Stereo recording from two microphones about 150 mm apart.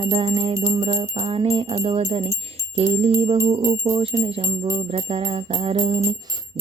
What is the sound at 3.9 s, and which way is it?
Speech, 40° right (ahead or behind).